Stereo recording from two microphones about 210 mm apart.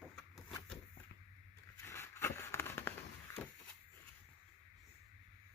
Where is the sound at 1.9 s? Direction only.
15° left (ahead or behind).